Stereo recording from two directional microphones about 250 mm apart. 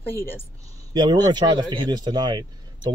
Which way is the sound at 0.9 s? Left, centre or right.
Centre.